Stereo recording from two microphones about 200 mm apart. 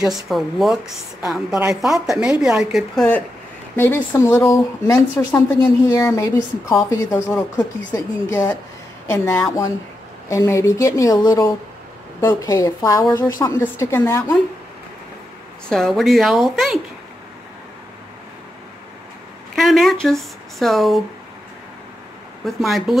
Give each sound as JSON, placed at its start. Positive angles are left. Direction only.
{"t": 0.0, "sound": "a woman's voice", "side_deg": 0}
{"t": 15.7, "sound": "a woman's voice", "side_deg": 0}
{"t": 19.5, "sound": "a woman's voice", "side_deg": 0}
{"t": 22.4, "sound": "a woman's voice", "side_deg": 0}